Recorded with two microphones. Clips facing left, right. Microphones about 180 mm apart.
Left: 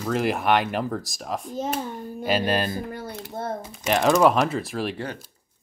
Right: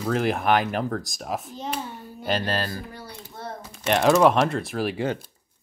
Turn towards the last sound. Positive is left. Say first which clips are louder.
# right 1 dB
turn(degrees=0)  # may be behind; listen again after turning